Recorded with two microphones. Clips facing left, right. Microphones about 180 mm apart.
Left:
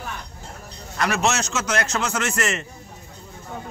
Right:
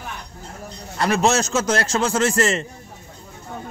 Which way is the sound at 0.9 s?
30° right (ahead or behind).